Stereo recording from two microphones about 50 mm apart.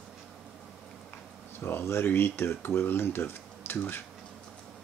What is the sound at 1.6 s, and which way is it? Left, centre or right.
Speech, left.